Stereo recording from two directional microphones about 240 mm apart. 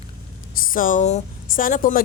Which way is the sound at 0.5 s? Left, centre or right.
Left.